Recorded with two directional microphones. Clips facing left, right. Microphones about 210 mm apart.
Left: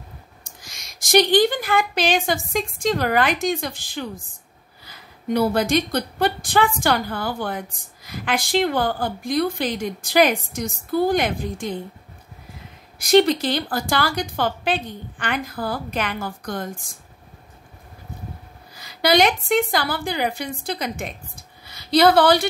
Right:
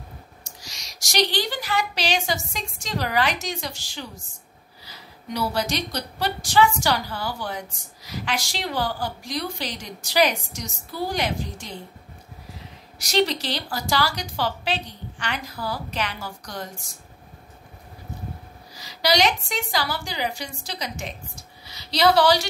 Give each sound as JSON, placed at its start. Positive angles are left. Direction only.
{"t": 0.4, "sound": "a woman's voice", "side_deg": 55}
{"t": 13.0, "sound": "a woman's voice", "side_deg": 55}
{"t": 18.8, "sound": "a woman's voice", "side_deg": 55}